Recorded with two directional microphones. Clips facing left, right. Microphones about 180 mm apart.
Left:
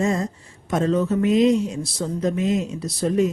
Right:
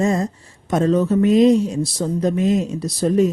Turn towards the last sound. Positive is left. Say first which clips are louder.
# right 3 dB
turn(degrees=-35)  # may be behind; listen again after turning